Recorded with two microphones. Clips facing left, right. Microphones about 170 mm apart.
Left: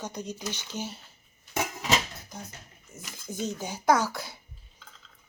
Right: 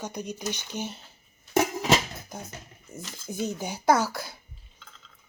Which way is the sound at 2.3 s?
50° right (ahead or behind).